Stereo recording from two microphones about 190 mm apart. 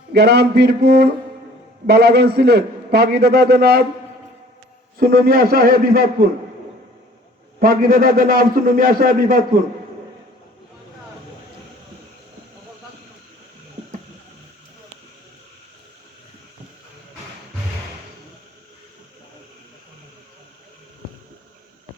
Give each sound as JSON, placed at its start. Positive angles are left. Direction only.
{"t": 0.1, "sound": "a man's voice", "side_deg": -60}
{"t": 4.9, "sound": "a man's voice", "side_deg": -50}
{"t": 7.6, "sound": "a man's voice", "side_deg": -50}